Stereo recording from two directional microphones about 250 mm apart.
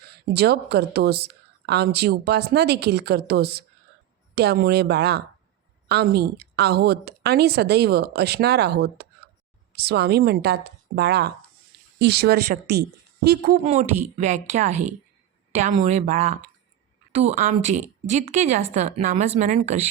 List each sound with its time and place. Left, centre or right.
0.1 s speech: right